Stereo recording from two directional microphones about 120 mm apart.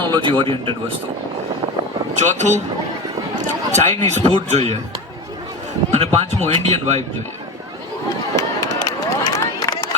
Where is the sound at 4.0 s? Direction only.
65° right (ahead or behind).